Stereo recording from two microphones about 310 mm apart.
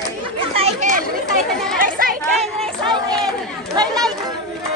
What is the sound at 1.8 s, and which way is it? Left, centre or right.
Chatter, right.